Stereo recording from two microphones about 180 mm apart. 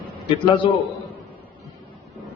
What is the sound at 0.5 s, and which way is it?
Speech, 30° left (ahead or behind).